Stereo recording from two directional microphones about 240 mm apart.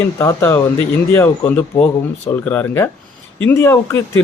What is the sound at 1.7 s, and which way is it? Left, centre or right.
Speech, left.